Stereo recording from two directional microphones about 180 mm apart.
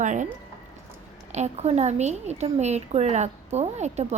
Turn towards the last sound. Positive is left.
turn(degrees=-40)  # may be behind; listen again after turning